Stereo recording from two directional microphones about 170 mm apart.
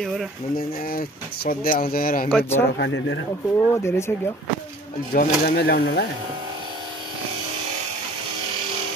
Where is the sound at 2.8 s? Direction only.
90° left.